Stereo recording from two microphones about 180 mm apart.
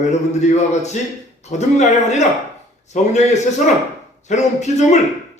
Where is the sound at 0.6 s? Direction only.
40° left (ahead or behind).